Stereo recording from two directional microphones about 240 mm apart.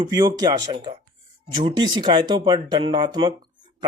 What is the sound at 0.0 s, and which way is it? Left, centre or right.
Speech, centre.